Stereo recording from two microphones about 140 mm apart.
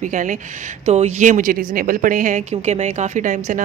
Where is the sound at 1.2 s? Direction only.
65° right (ahead or behind).